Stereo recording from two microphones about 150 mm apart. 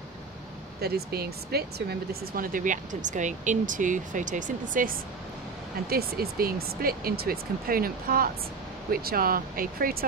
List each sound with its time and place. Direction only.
0.7 s speech: 90° right; by 4.9 s 60° right (ahead or behind)
5.9 s speech: 90° right